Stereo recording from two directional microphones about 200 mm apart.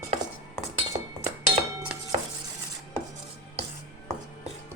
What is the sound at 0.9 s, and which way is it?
Chink, 30° right (ahead or behind).